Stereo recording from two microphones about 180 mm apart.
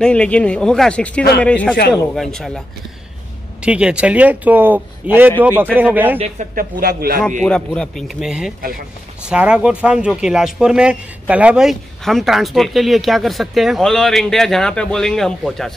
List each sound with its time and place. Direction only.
0.0 s a man's voice: 5° left (ahead or behind)
3.6 s speech: 5° right (ahead or behind)
6.1 s speech: 35° right (ahead or behind)
6.5 s speech: 55° right (ahead or behind)
7.4 s speech: 5° left (ahead or behind)